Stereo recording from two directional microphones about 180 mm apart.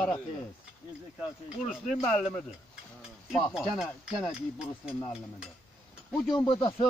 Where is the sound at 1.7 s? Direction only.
Centre (ahead or behind).